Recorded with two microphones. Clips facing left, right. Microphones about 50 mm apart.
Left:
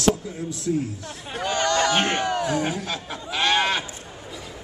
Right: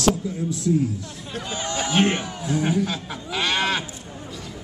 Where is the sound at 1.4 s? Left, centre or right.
Left.